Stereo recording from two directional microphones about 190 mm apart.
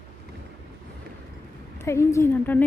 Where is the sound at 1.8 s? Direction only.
15° left (ahead or behind).